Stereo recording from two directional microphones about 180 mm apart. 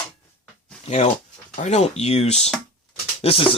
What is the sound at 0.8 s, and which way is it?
Speech, 35° left (ahead or behind).